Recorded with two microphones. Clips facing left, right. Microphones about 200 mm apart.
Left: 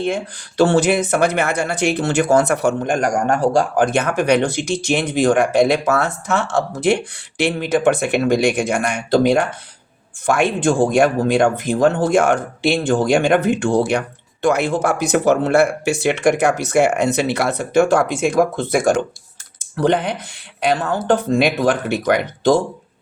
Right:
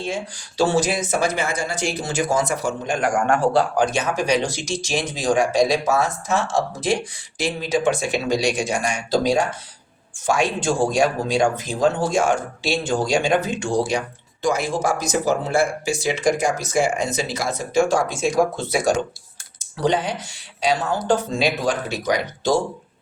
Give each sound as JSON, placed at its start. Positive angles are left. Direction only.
{"t": 0.0, "sound": "speech", "side_deg": 60}